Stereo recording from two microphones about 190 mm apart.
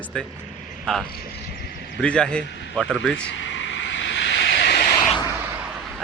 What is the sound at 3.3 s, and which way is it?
Vehicle, 75° left (ahead or behind).